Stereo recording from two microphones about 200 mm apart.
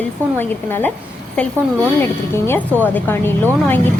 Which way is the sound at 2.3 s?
10° left (ahead or behind).